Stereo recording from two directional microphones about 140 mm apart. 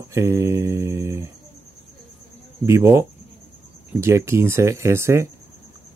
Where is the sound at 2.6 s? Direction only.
20° right (ahead or behind).